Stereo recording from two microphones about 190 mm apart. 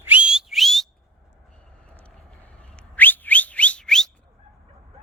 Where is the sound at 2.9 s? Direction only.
10° left (ahead or behind).